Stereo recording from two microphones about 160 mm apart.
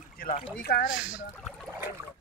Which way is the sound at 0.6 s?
80° left.